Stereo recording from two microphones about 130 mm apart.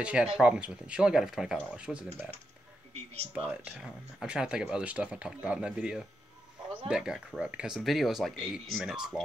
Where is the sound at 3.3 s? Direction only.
10° right (ahead or behind).